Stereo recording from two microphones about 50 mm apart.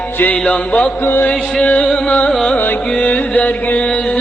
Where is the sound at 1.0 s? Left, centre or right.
Left.